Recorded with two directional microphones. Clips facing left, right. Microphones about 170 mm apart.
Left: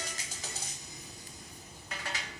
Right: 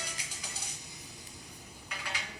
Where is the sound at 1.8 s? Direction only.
40° left (ahead or behind).